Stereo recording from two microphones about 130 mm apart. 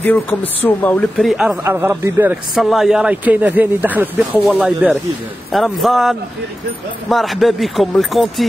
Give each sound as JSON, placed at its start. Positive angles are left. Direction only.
{"t": 0.0, "sound": "speech", "side_deg": 15}
{"t": 1.2, "sound": "speech", "side_deg": -5}
{"t": 1.6, "sound": "speech", "side_deg": -20}
{"t": 2.5, "sound": "speech", "side_deg": 0}